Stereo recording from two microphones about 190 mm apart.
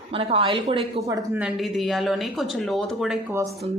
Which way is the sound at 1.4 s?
5° right (ahead or behind).